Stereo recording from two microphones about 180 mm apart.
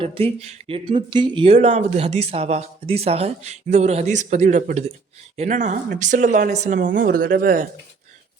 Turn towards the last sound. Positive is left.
turn(degrees=-50)  # may be behind; listen again after turning